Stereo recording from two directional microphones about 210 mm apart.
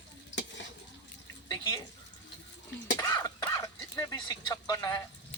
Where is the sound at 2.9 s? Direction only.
15° left (ahead or behind).